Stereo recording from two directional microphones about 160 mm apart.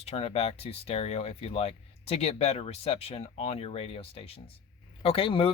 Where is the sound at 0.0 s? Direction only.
40° left (ahead or behind).